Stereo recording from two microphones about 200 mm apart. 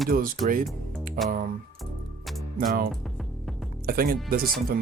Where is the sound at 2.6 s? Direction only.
45° right (ahead or behind).